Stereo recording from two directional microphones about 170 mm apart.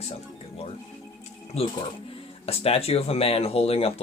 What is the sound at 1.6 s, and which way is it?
Speech, 35° left (ahead or behind).